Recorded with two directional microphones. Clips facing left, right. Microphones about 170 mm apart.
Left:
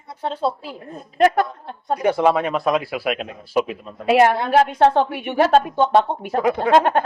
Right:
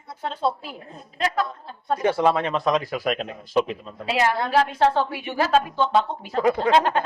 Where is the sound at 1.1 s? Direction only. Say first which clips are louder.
Left 8 dB; 65° left (ahead or behind).